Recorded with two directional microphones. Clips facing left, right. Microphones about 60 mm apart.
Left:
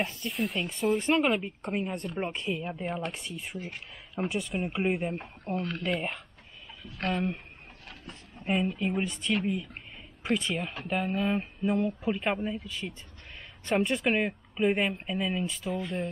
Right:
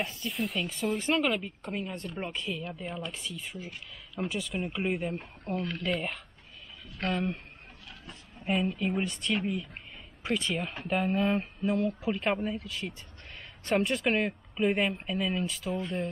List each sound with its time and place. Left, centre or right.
0.0 s speech: centre
1.2 s speech: centre
3.5 s speech: left
4.3 s speech: centre
5.1 s speech: left
5.9 s speech: centre
8.5 s speech: centre